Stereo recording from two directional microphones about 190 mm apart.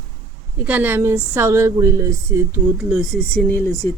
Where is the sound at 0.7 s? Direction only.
10° right (ahead or behind).